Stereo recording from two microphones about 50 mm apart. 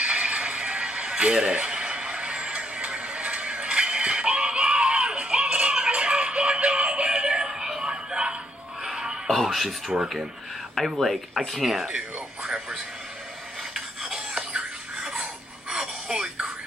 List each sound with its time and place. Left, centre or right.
0.0 s a sound: right
8.8 s music: centre
9.3 s speech: centre
11.0 s speech: centre
13.7 s a sound: centre
15.7 s music: centre